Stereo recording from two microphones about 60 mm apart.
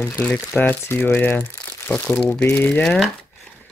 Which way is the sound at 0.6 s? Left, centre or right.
Left.